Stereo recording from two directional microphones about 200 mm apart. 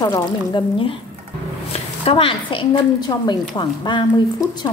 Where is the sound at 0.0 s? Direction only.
20° left (ahead or behind).